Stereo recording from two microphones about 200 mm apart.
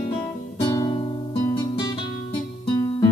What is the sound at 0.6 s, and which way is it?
Guitar, 20° left (ahead or behind).